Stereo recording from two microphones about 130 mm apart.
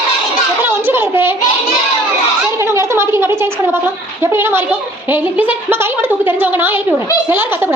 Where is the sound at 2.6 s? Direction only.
20° right (ahead or behind).